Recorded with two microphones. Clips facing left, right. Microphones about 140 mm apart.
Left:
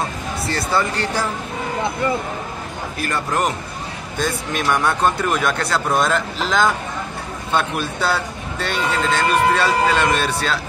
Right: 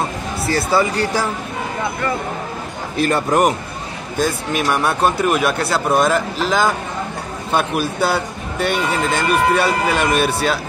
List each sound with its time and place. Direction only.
0.5 s speech: 5° right (ahead or behind)
3.0 s speech: 20° right (ahead or behind)